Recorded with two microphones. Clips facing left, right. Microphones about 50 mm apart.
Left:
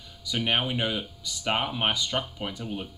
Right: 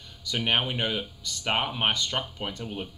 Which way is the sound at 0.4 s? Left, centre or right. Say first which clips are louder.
Even; centre.